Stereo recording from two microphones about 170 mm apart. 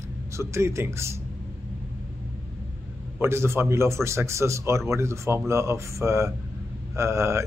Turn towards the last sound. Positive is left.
turn(degrees=-15)  # may be behind; listen again after turning